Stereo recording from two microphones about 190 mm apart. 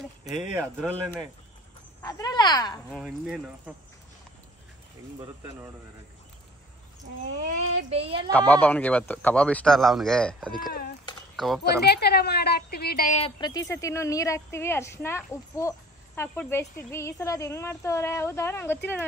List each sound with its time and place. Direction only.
0.4 s speech: centre (ahead or behind)
2.0 s speech: 20° left (ahead or behind)
2.9 s speech: centre (ahead or behind)
5.2 s speech: 10° right (ahead or behind)
7.4 s speech: 35° right (ahead or behind)
8.3 s speech: 10° left (ahead or behind)
11.8 s a woman's voice: 60° left (ahead or behind)
13.4 s speech: 20° left (ahead or behind)